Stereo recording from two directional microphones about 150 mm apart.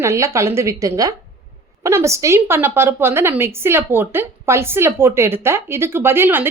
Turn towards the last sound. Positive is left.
turn(degrees=-15)  # may be behind; listen again after turning